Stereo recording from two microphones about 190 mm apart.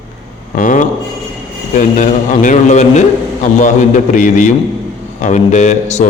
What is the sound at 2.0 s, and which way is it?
A man's voice, 40° left (ahead or behind).